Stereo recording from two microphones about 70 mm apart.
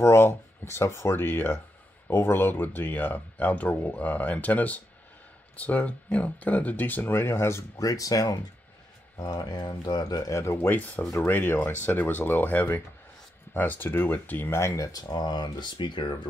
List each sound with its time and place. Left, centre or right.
0.0 s speech: left
7.8 s speech: left
9.1 s speech: left
10.4 s speech: left
11.1 s speech: left
14.5 s speech: left